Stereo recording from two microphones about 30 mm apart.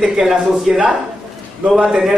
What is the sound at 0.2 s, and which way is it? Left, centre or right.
Speech, centre.